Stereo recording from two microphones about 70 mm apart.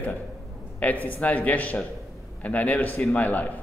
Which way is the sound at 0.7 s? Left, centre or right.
Left.